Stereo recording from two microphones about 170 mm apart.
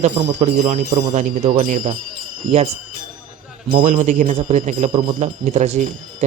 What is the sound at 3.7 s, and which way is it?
Speech, 60° right (ahead or behind).